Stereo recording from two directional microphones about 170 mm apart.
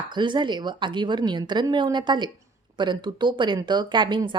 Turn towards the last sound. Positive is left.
turn(degrees=-25)  # may be behind; listen again after turning